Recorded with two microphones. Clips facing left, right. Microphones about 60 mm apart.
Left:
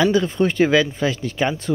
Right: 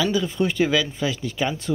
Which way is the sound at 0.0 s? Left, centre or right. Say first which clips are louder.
Left 5 dB; left.